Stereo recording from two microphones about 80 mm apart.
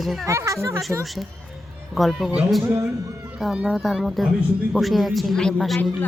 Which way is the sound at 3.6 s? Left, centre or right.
Centre.